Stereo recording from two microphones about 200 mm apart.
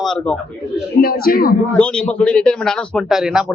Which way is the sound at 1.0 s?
50° left (ahead or behind).